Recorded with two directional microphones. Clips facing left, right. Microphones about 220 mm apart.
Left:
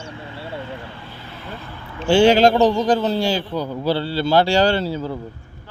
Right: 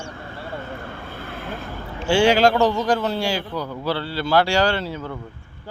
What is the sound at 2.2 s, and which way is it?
Speech, 20° left (ahead or behind).